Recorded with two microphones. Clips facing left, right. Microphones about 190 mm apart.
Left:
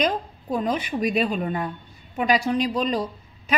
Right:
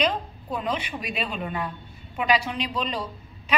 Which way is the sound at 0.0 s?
45° left (ahead or behind).